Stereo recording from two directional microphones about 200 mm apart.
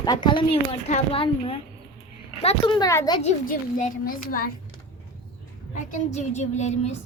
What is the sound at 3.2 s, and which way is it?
A woman's voice, 40° left (ahead or behind).